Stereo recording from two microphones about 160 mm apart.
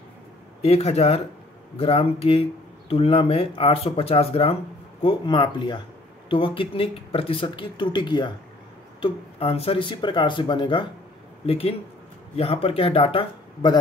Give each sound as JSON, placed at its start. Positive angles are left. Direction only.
{"t": 0.6, "sound": "speech", "side_deg": 40}